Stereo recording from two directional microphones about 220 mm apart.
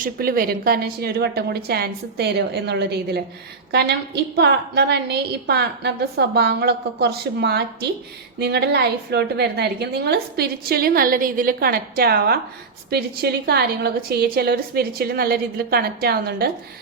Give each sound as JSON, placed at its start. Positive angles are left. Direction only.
{"t": 0.0, "sound": "a woman's voice", "side_deg": -45}